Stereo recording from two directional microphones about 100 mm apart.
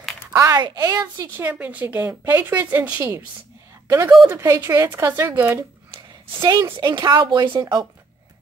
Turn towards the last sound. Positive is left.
turn(degrees=-45)  # may be behind; listen again after turning